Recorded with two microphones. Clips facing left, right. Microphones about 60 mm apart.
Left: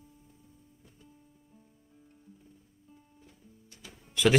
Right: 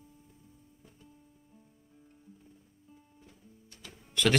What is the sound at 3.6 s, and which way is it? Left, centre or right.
Music, centre.